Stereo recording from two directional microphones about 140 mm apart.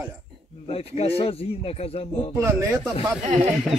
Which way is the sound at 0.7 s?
45° left (ahead or behind).